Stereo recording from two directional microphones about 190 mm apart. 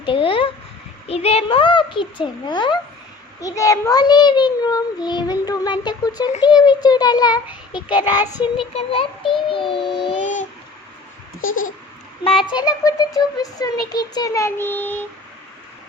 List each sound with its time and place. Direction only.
0.0 s babbling: 25° left (ahead or behind)
1.0 s a child's voice: 30° left (ahead or behind)
10.1 s a sound: 40° left (ahead or behind)
12.5 s a child's voice: 20° left (ahead or behind)